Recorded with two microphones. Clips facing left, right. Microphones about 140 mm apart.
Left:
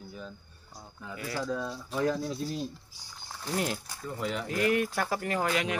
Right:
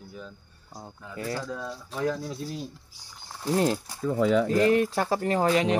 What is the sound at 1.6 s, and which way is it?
Speech, 5° left (ahead or behind).